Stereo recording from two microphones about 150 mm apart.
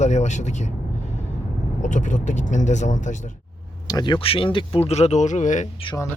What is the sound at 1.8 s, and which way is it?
Speech, 55° left (ahead or behind).